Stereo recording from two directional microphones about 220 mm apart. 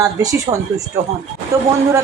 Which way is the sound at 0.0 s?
15° right (ahead or behind).